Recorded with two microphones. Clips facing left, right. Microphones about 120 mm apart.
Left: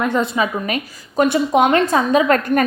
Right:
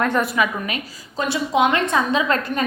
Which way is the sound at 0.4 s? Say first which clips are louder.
Left 1 dB; 20° left (ahead or behind).